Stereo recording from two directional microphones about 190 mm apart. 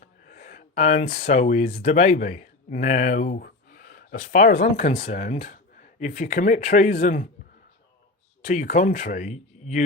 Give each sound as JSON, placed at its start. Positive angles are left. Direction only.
{"t": 0.0, "sound": "speech", "side_deg": 45}
{"t": 8.4, "sound": "speech", "side_deg": 45}